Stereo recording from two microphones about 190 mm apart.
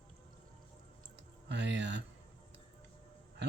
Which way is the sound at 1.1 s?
65° right (ahead or behind).